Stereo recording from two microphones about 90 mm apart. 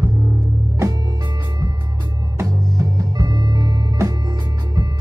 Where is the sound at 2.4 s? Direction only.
45° right (ahead or behind).